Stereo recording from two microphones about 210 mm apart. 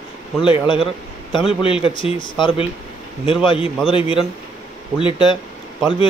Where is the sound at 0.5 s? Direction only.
25° left (ahead or behind).